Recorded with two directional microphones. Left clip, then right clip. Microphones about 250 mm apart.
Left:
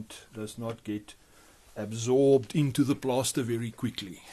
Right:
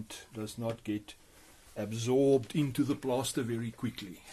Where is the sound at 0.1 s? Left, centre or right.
Centre; by 4.1 s left.